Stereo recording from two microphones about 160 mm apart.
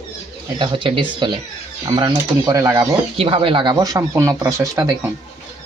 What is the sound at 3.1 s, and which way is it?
Speech, 35° right (ahead or behind).